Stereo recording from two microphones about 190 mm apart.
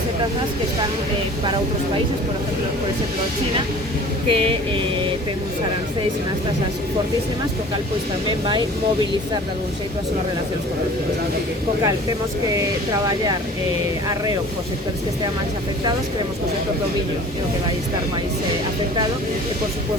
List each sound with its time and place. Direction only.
4.3 s speech: 30° right (ahead or behind)